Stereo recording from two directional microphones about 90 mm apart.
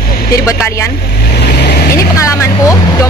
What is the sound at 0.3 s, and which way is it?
Speech, 35° left (ahead or behind).